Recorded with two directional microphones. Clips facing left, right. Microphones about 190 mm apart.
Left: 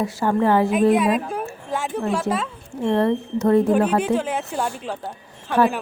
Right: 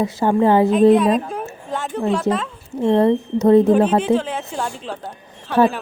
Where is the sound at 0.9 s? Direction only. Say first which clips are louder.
Right 3 dB; 5° left (ahead or behind).